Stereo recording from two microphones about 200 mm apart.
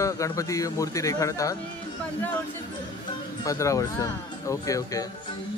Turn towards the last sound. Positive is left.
turn(degrees=15)  # may be behind; listen again after turning